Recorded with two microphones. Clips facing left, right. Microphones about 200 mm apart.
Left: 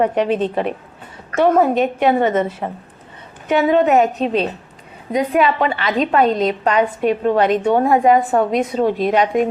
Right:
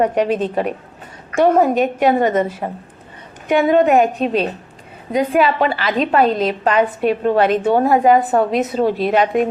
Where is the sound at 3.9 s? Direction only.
10° right (ahead or behind).